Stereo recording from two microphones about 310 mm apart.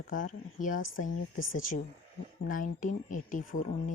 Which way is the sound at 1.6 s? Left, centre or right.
Left.